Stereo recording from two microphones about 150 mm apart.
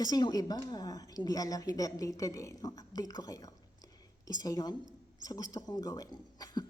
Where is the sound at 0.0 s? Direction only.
25° left (ahead or behind).